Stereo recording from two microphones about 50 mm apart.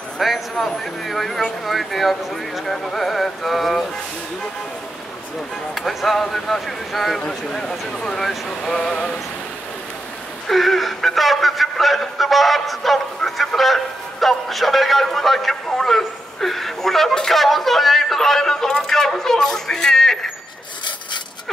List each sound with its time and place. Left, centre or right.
0.2 s speech: centre
5.8 s speech: centre
10.5 s speech: centre